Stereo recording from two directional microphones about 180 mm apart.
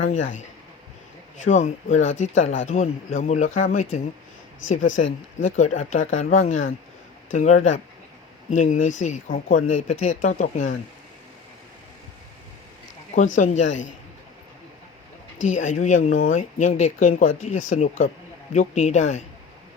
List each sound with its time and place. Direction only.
0.0 s speech: 45° left (ahead or behind)
1.5 s speech: 40° left (ahead or behind)
5.0 s speech: 90° left
5.5 s speech: 40° left (ahead or behind)
13.1 s speech: 45° left (ahead or behind)
15.4 s speech: 45° left (ahead or behind)